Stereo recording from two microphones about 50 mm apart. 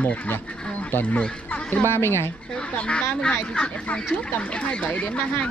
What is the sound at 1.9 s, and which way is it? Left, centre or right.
Speech, left.